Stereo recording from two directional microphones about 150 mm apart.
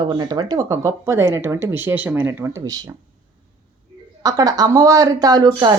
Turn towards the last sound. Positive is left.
turn(degrees=-30)  # may be behind; listen again after turning